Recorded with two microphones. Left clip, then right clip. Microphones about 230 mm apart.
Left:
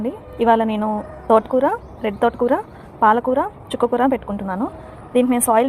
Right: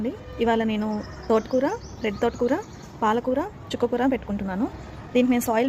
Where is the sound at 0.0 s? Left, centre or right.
Centre.